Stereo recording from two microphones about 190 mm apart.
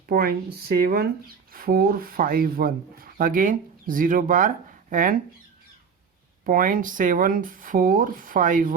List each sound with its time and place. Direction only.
0.1 s speech: 50° right (ahead or behind)
6.4 s speech: 45° right (ahead or behind)